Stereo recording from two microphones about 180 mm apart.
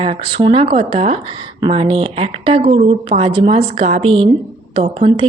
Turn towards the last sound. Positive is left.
turn(degrees=-30)  # may be behind; listen again after turning